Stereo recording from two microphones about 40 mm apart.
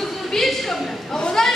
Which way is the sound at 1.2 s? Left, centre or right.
Centre.